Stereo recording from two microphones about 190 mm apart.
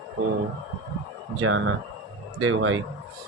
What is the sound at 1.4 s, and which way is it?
Speech, 90° right.